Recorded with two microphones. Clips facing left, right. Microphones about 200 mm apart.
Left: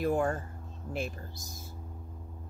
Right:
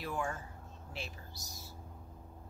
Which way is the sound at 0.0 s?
50° left (ahead or behind).